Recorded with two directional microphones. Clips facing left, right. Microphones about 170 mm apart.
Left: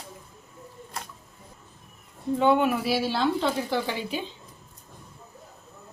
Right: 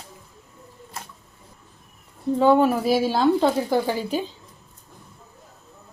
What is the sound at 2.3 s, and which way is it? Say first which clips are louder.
Speech: right 4 dB; 35° right (ahead or behind).